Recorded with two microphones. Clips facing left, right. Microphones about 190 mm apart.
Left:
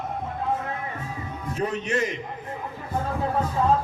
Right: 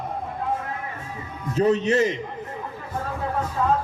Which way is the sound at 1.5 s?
25° right (ahead or behind).